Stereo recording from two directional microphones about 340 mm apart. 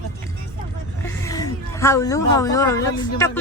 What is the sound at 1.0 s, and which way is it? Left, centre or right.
Speech, centre.